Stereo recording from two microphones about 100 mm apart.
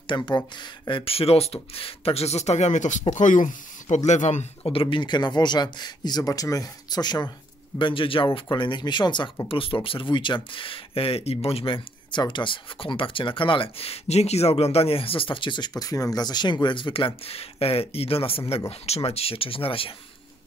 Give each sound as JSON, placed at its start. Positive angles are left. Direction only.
{"t": 0.0, "sound": "speech", "side_deg": 50}
{"t": 3.1, "sound": "speech", "side_deg": 70}
{"t": 4.4, "sound": "speech", "side_deg": 65}
{"t": 7.8, "sound": "speech", "side_deg": 60}
{"t": 9.5, "sound": "speech", "side_deg": 60}
{"t": 18.7, "sound": "speech", "side_deg": 85}